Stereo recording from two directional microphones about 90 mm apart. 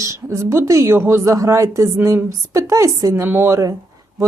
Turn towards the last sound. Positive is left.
turn(degrees=-30)  # may be behind; listen again after turning